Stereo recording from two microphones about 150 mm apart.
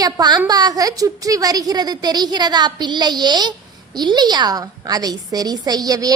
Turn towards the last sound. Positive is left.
turn(degrees=-25)  # may be behind; listen again after turning